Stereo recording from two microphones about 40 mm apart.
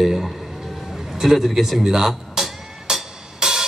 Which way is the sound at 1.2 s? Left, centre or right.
Centre.